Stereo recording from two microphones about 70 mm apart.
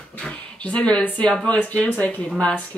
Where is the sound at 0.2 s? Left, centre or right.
Centre.